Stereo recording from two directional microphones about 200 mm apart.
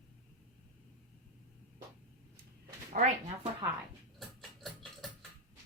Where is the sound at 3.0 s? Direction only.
45° right (ahead or behind).